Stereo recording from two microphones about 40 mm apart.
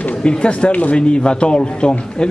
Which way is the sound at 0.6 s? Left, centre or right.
Left.